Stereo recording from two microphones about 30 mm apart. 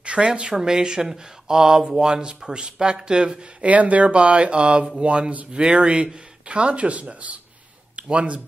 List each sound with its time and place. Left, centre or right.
0.0 s a sound: right
0.3 s speech: right
3.6 s speech: right
7.9 s speech: right